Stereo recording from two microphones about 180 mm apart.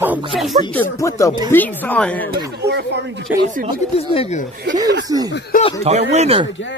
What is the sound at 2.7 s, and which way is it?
Speech, 70° right (ahead or behind).